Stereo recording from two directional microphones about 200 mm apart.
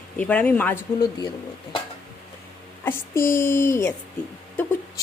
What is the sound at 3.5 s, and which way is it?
Speech, 15° left (ahead or behind).